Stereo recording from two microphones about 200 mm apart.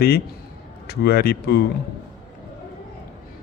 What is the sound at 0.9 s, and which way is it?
Speech, 50° left (ahead or behind).